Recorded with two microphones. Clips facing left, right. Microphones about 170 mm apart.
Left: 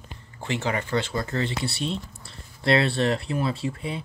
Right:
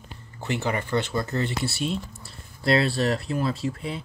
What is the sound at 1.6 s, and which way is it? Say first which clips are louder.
Speech: right 1 dB; 5° right (ahead or behind).